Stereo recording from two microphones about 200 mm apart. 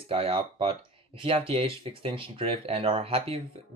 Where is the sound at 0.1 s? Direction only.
30° right (ahead or behind).